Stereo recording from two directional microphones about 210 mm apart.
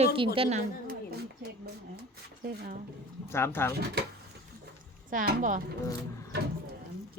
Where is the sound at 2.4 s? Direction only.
45° right (ahead or behind).